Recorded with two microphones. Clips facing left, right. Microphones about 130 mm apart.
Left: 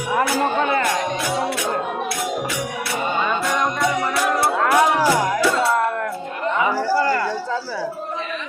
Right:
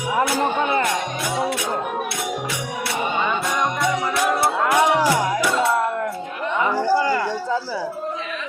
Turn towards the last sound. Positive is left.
turn(degrees=-15)  # may be behind; listen again after turning